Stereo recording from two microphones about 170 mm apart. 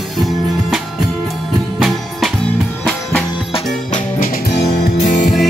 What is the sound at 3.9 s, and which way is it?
Music, 55° left (ahead or behind).